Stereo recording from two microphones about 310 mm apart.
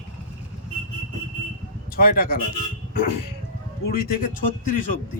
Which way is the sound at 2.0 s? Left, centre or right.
Left.